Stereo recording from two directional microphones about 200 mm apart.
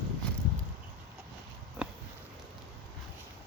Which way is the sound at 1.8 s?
5° right (ahead or behind).